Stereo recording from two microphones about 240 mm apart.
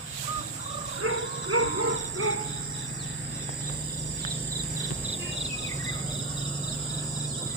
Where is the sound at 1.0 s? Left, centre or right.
Right.